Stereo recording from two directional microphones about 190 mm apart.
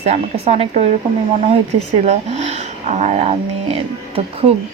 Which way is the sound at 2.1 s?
35° right (ahead or behind).